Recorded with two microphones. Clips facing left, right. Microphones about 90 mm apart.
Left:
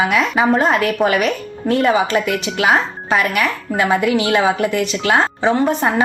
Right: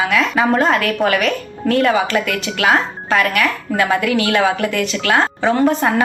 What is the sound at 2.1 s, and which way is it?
Speech, 25° left (ahead or behind).